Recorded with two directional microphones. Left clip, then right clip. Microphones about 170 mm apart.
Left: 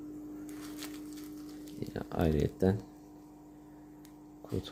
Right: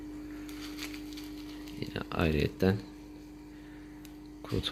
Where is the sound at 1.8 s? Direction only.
15° left (ahead or behind).